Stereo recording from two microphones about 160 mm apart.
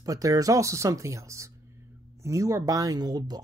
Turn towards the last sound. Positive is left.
turn(degrees=-25)  # may be behind; listen again after turning